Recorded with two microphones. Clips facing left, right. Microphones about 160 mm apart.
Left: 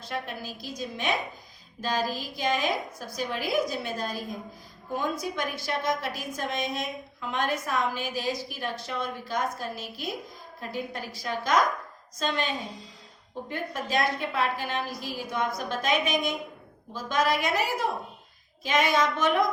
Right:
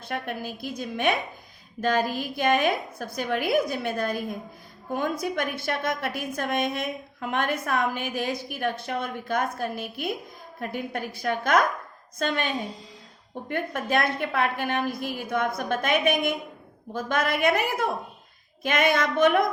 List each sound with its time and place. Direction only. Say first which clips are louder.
0.0 s a woman's voice: right 3 dB; 55° right (ahead or behind)
13.5 s a woman's voice: right 4 dB; 60° right (ahead or behind)